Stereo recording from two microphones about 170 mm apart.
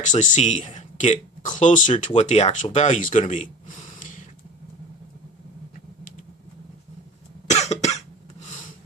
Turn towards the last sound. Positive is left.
turn(degrees=40)  # may be behind; listen again after turning